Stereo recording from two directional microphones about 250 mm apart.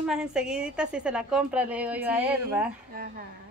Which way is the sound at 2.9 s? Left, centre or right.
Right.